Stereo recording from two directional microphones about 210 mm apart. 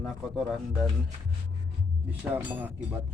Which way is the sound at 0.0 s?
Centre (ahead or behind).